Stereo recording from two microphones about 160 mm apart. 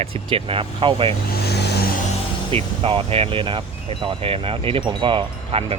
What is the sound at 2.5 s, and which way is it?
Speech, 35° right (ahead or behind).